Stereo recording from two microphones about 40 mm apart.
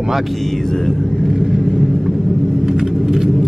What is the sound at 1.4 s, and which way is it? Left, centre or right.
Vehicle, centre.